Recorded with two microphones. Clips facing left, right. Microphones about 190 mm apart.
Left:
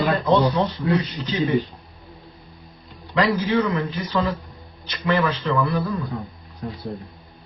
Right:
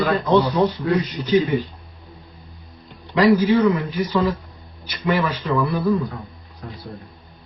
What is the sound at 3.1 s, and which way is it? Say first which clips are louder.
Speech: right 5 dB; 10° right (ahead or behind).